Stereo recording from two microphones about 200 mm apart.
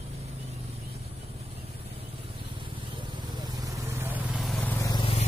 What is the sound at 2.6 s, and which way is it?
Vehicle, 25° right (ahead or behind).